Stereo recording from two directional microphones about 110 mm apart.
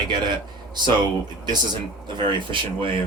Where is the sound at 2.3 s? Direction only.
50° right (ahead or behind).